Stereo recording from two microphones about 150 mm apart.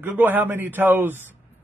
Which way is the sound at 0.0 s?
10° right (ahead or behind).